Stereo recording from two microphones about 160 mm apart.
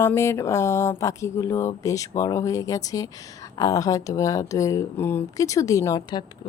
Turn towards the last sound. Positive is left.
turn(degrees=25)  # may be behind; listen again after turning